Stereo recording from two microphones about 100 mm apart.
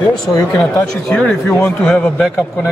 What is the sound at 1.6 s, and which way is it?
Speech, 20° left (ahead or behind).